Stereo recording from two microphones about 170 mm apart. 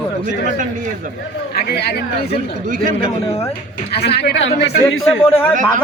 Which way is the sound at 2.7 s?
50° right (ahead or behind).